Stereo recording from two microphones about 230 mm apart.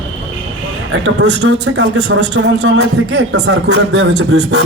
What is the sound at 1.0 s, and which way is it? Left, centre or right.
Speech, right.